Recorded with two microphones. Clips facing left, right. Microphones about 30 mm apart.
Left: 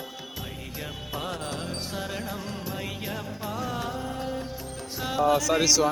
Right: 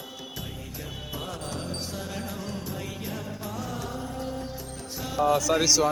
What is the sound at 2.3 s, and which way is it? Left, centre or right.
Music, centre.